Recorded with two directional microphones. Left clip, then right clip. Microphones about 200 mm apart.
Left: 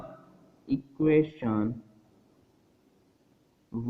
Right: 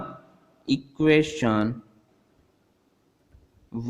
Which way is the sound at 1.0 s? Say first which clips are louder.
Right 4 dB; 40° right (ahead or behind).